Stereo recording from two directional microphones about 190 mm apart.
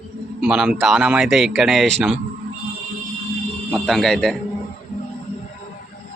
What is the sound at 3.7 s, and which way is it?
Speech, centre (ahead or behind).